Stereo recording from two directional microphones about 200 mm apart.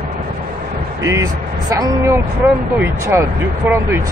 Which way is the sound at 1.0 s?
15° right (ahead or behind).